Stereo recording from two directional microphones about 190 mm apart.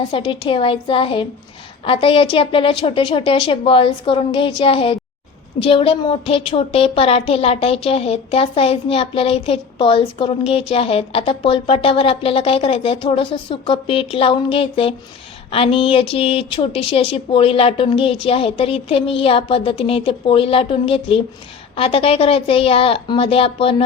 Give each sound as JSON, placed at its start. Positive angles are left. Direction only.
{"t": 0.1, "sound": "a woman's voice", "side_deg": 25}